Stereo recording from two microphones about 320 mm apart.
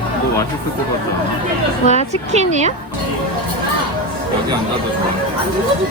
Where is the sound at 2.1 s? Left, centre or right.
Right.